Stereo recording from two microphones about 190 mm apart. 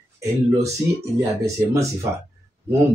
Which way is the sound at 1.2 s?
15° right (ahead or behind).